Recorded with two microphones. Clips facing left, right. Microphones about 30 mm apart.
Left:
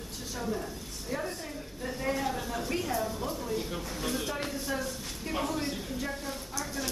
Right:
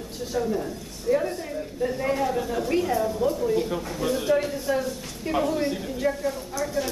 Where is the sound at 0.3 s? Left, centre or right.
Centre.